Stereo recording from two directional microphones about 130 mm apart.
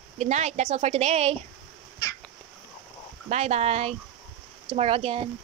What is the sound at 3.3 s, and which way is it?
Speech, 55° right (ahead or behind).